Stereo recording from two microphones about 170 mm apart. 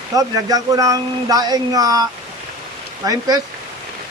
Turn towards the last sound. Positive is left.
turn(degrees=-20)  # may be behind; listen again after turning